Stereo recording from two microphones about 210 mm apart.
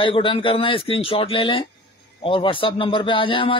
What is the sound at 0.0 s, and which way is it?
A man's voice, 25° left (ahead or behind).